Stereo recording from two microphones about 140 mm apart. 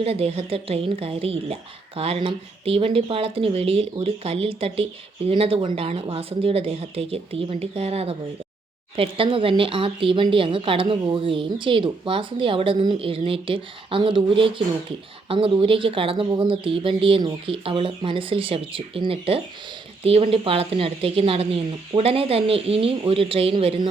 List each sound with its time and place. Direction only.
0.0 s speech: 45° right (ahead or behind)